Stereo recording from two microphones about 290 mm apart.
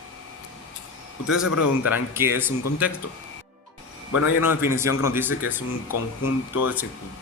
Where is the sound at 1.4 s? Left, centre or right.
Left.